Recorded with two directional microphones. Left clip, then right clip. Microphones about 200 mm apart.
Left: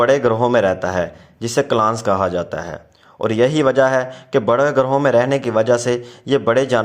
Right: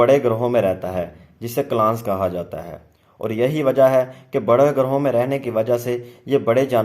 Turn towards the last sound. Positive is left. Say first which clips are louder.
# left 2 dB
turn(degrees=10)  # may be behind; listen again after turning